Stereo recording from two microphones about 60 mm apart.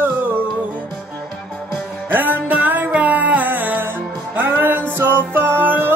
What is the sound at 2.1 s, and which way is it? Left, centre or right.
Music, right.